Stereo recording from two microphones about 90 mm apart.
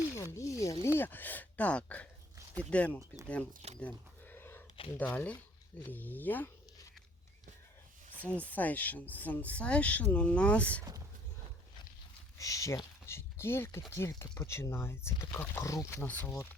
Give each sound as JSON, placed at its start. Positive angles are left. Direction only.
{"t": 0.2, "sound": "speech", "side_deg": 35}
{"t": 0.9, "sound": "speech", "side_deg": 20}
{"t": 8.2, "sound": "speech", "side_deg": 15}
{"t": 12.4, "sound": "speech", "side_deg": 35}